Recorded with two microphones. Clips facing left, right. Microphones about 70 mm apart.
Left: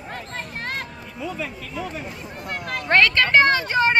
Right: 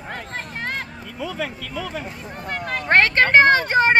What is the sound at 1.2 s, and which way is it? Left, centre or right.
Speech, right.